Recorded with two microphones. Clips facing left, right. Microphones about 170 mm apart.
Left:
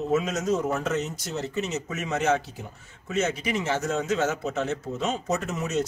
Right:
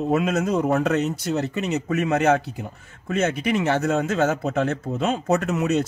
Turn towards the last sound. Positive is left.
turn(degrees=-65)  # may be behind; listen again after turning